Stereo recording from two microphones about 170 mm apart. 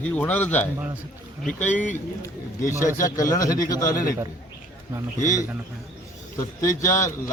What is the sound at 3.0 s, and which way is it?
A man's voice, 20° left (ahead or behind).